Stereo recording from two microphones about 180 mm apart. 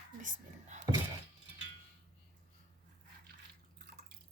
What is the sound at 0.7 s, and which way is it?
Speech, 45° right (ahead or behind).